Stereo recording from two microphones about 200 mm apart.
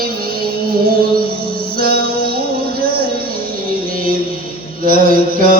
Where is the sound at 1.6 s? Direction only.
50° right (ahead or behind).